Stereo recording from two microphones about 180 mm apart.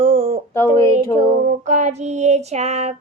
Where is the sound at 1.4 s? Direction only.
40° right (ahead or behind).